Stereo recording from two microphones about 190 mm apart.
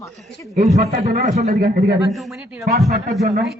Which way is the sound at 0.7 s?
35° right (ahead or behind).